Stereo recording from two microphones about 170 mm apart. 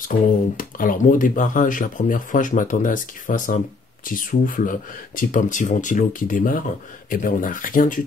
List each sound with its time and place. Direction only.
0.1 s speech: 50° left (ahead or behind)